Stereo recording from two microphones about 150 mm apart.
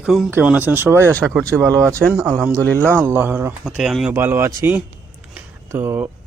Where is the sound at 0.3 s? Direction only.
10° right (ahead or behind).